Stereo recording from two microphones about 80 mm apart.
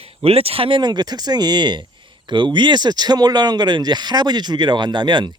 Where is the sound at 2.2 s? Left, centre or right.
Right.